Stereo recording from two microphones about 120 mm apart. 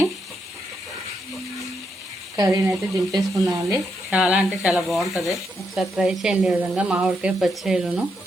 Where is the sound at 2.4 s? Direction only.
25° right (ahead or behind).